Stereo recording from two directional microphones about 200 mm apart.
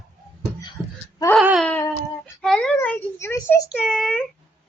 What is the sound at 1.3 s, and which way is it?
Babbling, centre (ahead or behind).